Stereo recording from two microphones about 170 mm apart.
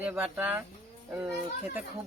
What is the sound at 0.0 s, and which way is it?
Speech, 10° right (ahead or behind).